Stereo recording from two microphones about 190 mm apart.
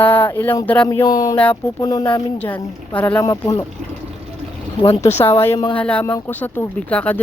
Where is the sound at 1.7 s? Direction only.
20° left (ahead or behind).